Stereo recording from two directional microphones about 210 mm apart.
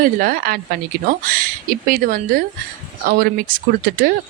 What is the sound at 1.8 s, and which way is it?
Speech, 40° right (ahead or behind).